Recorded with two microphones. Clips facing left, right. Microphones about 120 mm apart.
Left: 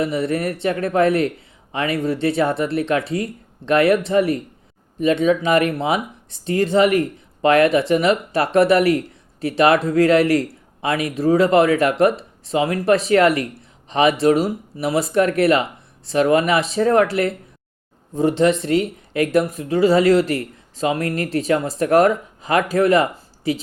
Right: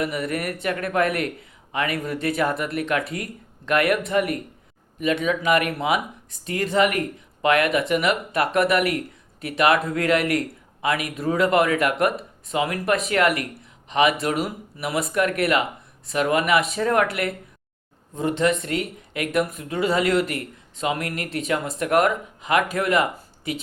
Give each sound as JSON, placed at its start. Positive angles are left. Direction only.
{"t": 0.0, "sound": "a man's voice", "side_deg": 30}